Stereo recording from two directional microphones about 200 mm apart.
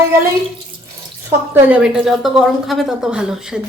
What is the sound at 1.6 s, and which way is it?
A woman's voice, 5° right (ahead or behind).